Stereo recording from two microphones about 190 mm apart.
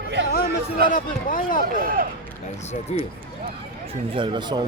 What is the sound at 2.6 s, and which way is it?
Speech, 35° left (ahead or behind).